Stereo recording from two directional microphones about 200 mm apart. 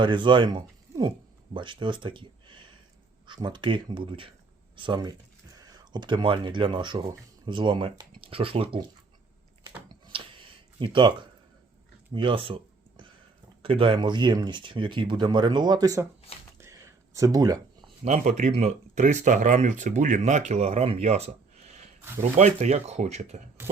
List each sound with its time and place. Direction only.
0.0 s speech: 25° right (ahead or behind)
9.6 s typing: 25° right (ahead or behind)
12.1 s speech: 25° right (ahead or behind)
13.6 s speech: 25° right (ahead or behind)
16.6 s a sound: 15° right (ahead or behind)
18.0 s speech: 35° right (ahead or behind)